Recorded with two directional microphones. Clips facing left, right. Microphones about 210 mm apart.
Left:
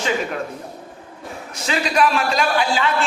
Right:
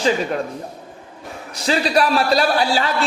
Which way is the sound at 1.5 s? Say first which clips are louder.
Right 4 dB; 35° right (ahead or behind).